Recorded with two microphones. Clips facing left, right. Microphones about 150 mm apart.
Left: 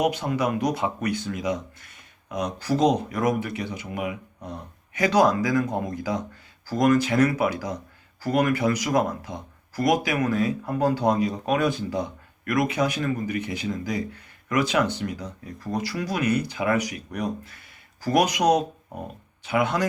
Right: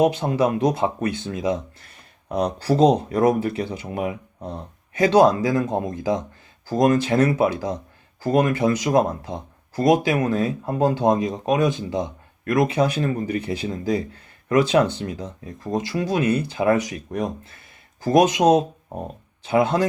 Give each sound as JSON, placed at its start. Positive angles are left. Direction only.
{"t": 0.0, "sound": "speech", "side_deg": -25}